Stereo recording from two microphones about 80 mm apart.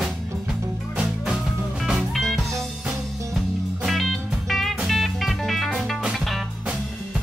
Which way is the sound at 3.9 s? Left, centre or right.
Centre.